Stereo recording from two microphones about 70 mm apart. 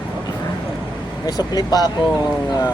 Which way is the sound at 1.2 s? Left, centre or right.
Left.